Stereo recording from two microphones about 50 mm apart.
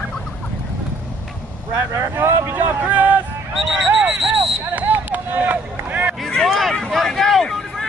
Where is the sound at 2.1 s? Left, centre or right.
Right.